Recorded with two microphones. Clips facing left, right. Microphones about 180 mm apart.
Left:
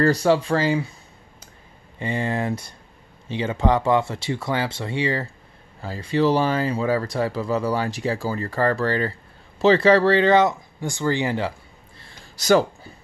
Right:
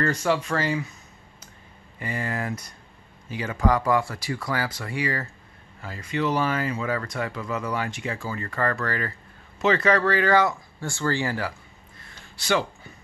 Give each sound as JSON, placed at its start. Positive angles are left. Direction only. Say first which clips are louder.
{"t": 0.0, "sound": "speech", "louder": "left 6 dB", "side_deg": 35}
{"t": 2.0, "sound": "speech", "louder": "left 5 dB", "side_deg": 25}
{"t": 12.4, "sound": "speech", "louder": "left 7 dB", "side_deg": 40}